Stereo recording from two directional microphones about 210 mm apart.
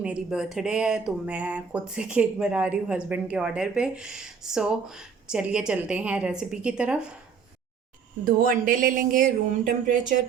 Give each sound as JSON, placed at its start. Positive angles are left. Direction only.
{"t": 0.0, "sound": "speech", "side_deg": -5}
{"t": 8.2, "sound": "speech", "side_deg": -45}